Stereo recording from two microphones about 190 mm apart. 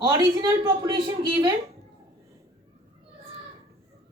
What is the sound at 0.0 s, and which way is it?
Speech, 20° right (ahead or behind).